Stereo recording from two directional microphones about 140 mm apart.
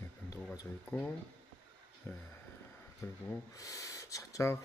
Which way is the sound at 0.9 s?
10° left (ahead or behind).